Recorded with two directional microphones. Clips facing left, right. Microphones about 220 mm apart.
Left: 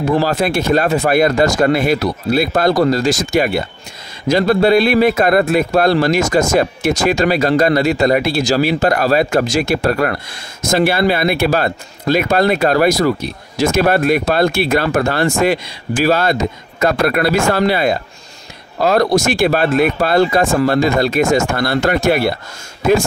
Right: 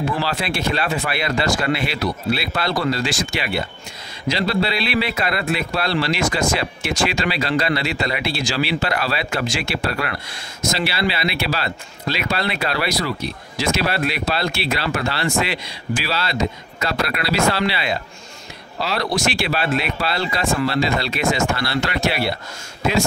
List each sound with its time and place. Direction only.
0.0 s speech: 45° left (ahead or behind)